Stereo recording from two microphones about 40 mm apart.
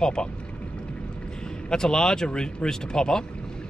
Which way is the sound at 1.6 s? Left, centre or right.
Centre.